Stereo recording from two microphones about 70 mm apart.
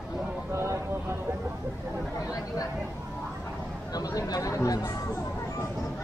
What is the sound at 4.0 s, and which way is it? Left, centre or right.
Chatter, left.